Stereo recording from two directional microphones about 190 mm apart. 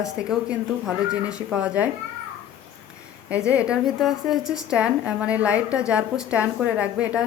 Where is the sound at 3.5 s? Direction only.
5° right (ahead or behind).